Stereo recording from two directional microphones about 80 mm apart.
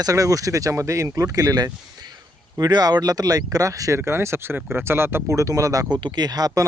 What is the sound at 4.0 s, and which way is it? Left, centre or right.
Speech, right.